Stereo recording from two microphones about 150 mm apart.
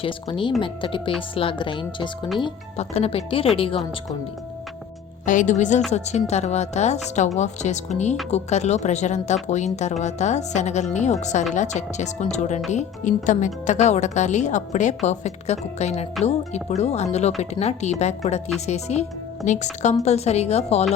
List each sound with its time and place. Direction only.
0.0 s a woman's voice: 35° left (ahead or behind)
5.2 s a woman's voice: 60° left (ahead or behind)